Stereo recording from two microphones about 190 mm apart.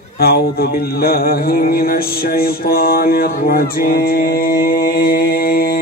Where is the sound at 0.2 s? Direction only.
55° left (ahead or behind).